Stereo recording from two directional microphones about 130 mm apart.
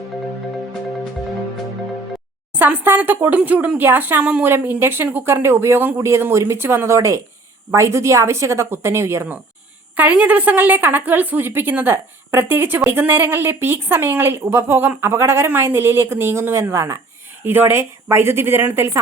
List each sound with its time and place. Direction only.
2.6 s a woman's voice: 15° right (ahead or behind)